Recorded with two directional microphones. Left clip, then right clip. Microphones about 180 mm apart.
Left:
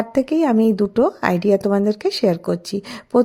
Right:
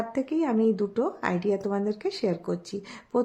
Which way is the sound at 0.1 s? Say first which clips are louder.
Left 12 dB; 45° left (ahead or behind).